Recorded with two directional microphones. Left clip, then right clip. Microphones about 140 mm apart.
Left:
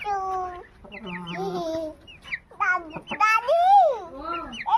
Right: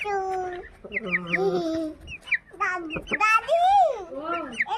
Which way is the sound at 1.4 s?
20° left (ahead or behind).